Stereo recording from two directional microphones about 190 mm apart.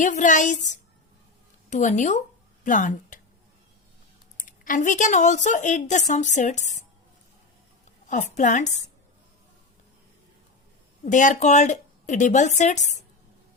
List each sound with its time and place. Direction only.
0.0 s a woman's voice: 40° left (ahead or behind)
4.4 s a woman's voice: 45° left (ahead or behind)
8.4 s a woman's voice: 40° left (ahead or behind)
11.0 s a woman's voice: 40° left (ahead or behind)